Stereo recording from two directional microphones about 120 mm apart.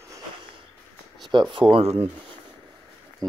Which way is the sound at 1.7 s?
55° right (ahead or behind).